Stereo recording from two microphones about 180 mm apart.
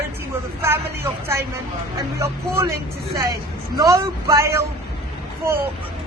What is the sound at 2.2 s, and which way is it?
Speech, 15° right (ahead or behind).